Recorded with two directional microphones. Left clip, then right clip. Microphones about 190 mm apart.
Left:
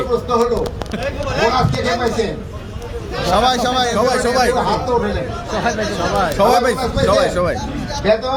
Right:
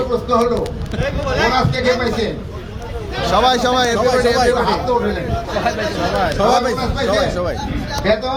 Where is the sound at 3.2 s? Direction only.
10° right (ahead or behind).